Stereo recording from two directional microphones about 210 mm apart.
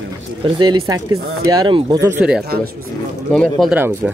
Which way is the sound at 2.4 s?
45° right (ahead or behind).